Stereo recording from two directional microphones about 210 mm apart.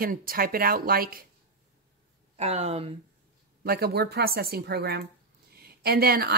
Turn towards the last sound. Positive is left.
turn(degrees=-45)  # may be behind; listen again after turning